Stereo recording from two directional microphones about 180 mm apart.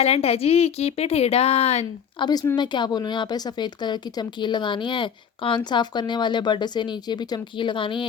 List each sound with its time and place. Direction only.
0.0 s a woman's voice: 35° left (ahead or behind)
2.2 s a woman's voice: 20° left (ahead or behind)